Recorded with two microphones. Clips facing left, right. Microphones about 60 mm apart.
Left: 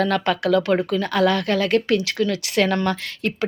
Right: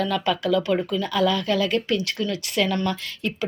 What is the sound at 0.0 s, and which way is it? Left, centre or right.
Speech, left.